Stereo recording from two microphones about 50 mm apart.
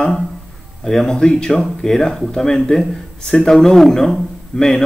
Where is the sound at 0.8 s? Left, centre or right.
Centre.